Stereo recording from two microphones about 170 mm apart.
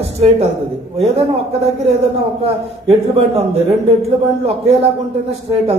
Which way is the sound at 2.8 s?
35° right (ahead or behind).